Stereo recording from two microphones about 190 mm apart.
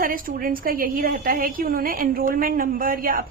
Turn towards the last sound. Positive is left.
turn(degrees=-45)  # may be behind; listen again after turning